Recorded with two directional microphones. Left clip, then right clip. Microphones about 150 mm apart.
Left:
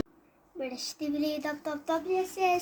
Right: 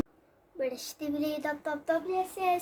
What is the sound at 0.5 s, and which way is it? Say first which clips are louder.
Child singing: right 2 dB; 15° right (ahead or behind).